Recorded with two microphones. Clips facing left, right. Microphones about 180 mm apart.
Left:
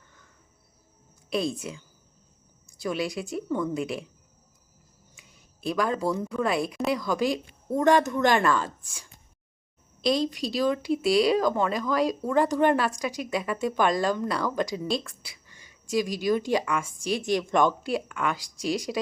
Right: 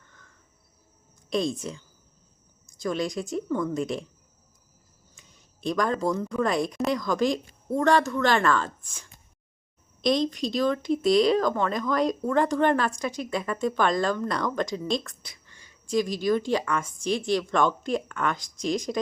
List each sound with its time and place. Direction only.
1.3 s speech: 5° left (ahead or behind)
2.8 s speech: 5° left (ahead or behind)
5.5 s speech: 5° left (ahead or behind)
7.8 s speech: 15° left (ahead or behind)
10.0 s speech: 5° left (ahead or behind)